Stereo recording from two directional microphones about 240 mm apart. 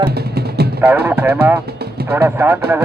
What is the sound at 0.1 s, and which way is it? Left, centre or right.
Music, right.